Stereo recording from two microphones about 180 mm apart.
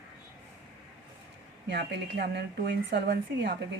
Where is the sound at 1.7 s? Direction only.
70° right (ahead or behind).